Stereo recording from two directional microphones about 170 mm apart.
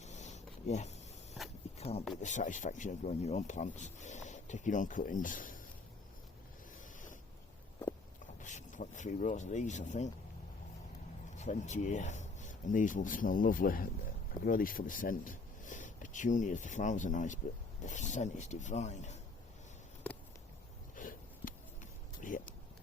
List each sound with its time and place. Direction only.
0.0 s a sound: 40° left (ahead or behind)
1.8 s speech: 35° left (ahead or behind)
2.2 s speech: 45° left (ahead or behind)
8.4 s speech: 45° left (ahead or behind)
11.3 s speech: 45° left (ahead or behind)
20.9 s sniff: 50° left (ahead or behind)
22.2 s a sound: 50° left (ahead or behind)